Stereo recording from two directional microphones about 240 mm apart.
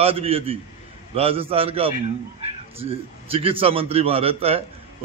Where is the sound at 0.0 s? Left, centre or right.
Right.